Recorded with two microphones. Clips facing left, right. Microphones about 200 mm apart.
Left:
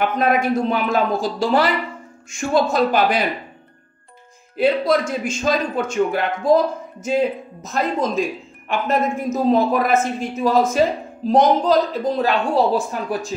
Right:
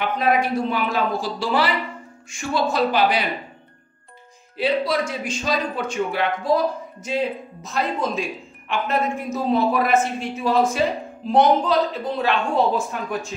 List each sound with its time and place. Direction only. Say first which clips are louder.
0.0 s a man's voice: left 2 dB; 45° left (ahead or behind)
4.6 s a man's voice: left 4 dB; 45° left (ahead or behind)